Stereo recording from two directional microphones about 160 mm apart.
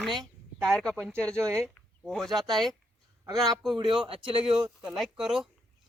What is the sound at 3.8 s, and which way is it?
Speech, 30° right (ahead or behind).